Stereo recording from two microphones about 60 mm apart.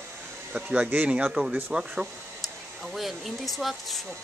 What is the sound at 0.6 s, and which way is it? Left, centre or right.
Speech, centre.